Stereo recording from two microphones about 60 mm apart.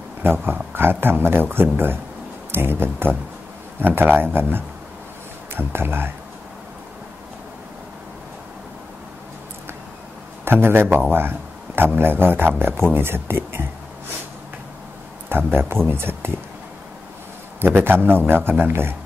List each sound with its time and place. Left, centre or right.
0.2 s a man's voice: right
10.4 s a man's voice: right
15.2 s a man's voice: right
15.9 s a sound: right
17.6 s a man's voice: right